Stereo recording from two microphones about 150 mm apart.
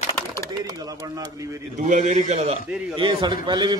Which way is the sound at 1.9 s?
50° right (ahead or behind).